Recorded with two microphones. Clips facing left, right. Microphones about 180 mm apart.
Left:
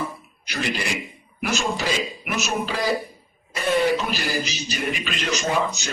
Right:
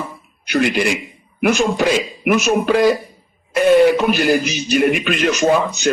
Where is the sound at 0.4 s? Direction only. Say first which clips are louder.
Right 10 dB; 65° right (ahead or behind).